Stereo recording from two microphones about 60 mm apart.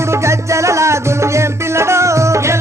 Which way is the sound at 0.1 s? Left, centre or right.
Right.